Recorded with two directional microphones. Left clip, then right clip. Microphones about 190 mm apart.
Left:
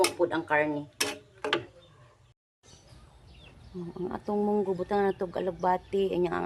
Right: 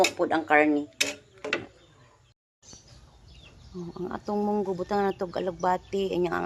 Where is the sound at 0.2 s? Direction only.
25° right (ahead or behind).